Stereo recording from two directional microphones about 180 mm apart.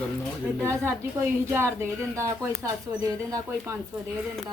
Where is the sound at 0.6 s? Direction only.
15° right (ahead or behind).